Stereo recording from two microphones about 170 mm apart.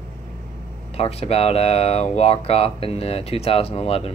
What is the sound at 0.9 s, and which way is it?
Speech, 35° left (ahead or behind).